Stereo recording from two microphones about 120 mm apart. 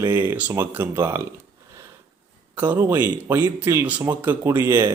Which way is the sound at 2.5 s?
15° right (ahead or behind).